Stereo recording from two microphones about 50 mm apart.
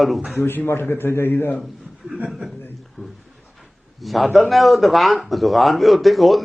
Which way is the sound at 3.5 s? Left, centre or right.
Centre.